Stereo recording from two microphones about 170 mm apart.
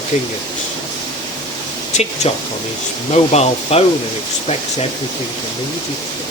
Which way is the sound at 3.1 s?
40° left (ahead or behind).